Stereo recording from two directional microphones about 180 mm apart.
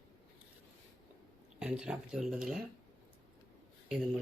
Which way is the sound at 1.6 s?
5° right (ahead or behind).